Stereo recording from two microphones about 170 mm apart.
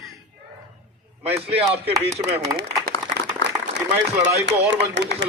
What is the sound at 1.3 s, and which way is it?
Speech, 35° right (ahead or behind).